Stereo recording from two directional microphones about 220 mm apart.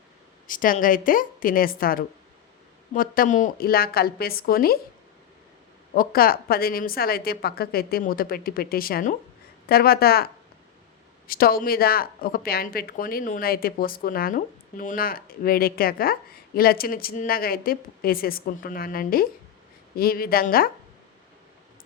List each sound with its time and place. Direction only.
0.4 s a woman's voice: 40° left (ahead or behind)
5.9 s speech: 40° left (ahead or behind)